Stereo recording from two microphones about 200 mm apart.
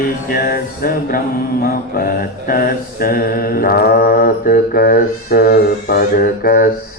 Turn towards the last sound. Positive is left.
turn(degrees=45)  # may be behind; listen again after turning